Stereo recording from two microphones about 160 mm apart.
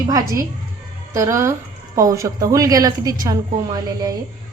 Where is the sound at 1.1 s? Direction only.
20° right (ahead or behind).